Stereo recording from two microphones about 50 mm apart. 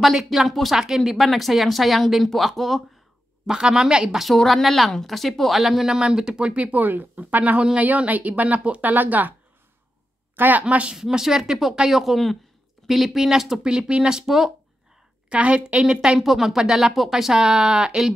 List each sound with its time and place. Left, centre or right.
0.0 s speech: centre
3.4 s speech: centre
4.5 s speech: centre; by 8.9 s right
8.9 s speech: right
10.3 s a woman's voice: right
10.6 s a woman's voice: right
11.0 s speech: centre
15.2 s a woman's voice: right
16.2 s speech: centre